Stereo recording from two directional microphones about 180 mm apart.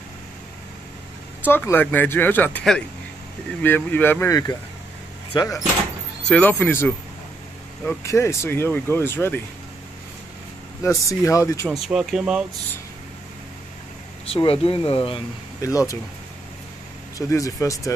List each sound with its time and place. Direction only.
1.4 s speech: 10° left (ahead or behind)
10.8 s speech: 15° left (ahead or behind)
11.7 s speech: 5° right (ahead or behind)
14.2 s speech: 30° left (ahead or behind)
15.6 s speech: 20° left (ahead or behind)
17.3 s speech: 20° left (ahead or behind)